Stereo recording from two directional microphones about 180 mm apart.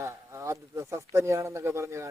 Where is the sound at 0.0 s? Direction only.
15° right (ahead or behind).